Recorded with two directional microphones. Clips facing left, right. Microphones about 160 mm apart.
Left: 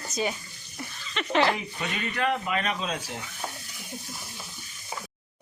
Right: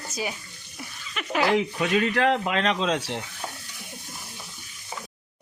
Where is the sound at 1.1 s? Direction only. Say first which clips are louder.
Right 1 dB; 5° right (ahead or behind).